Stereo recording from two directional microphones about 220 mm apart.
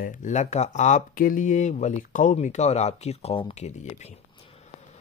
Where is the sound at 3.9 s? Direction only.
30° left (ahead or behind).